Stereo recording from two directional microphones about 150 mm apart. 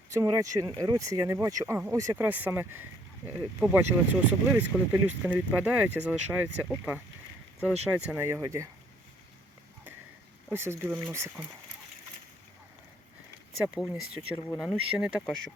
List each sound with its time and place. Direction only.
0.1 s speech: 20° right (ahead or behind)
10.5 s speech: 15° right (ahead or behind)
13.7 s speech: 5° right (ahead or behind)